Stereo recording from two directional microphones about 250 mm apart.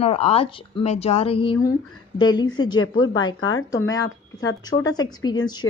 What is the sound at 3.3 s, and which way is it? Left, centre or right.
Speech, left.